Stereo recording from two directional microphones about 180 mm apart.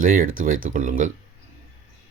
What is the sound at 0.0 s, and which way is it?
Speech, 50° right (ahead or behind).